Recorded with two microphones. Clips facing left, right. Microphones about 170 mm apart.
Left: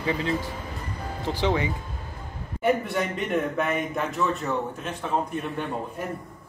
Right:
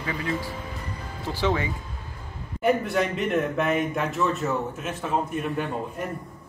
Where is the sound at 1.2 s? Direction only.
20° left (ahead or behind).